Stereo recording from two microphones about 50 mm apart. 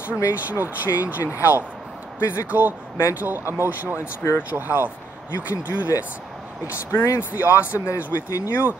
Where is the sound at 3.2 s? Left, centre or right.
Right.